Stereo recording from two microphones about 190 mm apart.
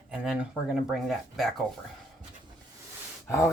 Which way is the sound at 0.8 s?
Centre (ahead or behind).